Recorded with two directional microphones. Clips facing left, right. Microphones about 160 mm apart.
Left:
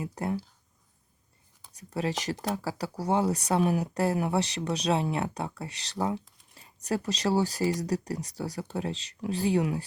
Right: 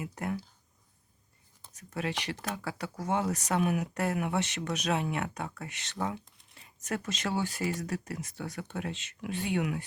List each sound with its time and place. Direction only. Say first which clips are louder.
0.0 s speech: left 4 dB; 30° left (ahead or behind)
1.7 s speech: left 4 dB; 35° left (ahead or behind)